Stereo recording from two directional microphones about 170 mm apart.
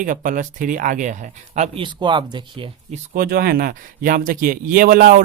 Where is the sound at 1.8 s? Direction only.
25° right (ahead or behind).